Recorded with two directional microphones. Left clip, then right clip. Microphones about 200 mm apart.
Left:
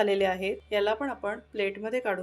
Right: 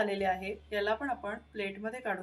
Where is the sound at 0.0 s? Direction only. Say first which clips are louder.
Left 6 dB; 35° left (ahead or behind).